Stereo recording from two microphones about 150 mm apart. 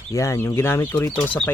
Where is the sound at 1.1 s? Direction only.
10° left (ahead or behind).